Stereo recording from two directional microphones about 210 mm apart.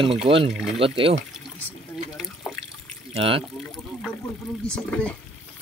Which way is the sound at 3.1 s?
25° right (ahead or behind).